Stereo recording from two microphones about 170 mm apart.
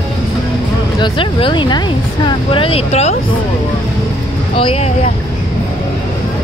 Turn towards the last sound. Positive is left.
turn(degrees=35)  # may be behind; listen again after turning